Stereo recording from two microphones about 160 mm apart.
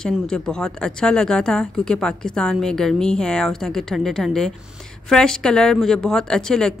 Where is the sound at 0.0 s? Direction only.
5° left (ahead or behind).